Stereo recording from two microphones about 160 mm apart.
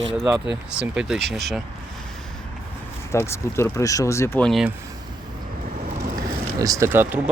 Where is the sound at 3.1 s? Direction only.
15° left (ahead or behind).